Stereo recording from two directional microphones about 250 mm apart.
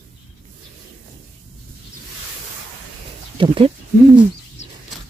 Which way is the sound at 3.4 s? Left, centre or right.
Right.